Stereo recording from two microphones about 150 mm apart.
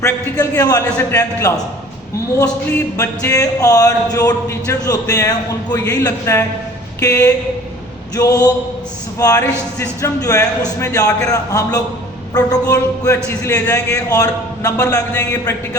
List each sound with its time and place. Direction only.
0.0 s speech: 25° left (ahead or behind)
3.0 s speech: 25° left (ahead or behind)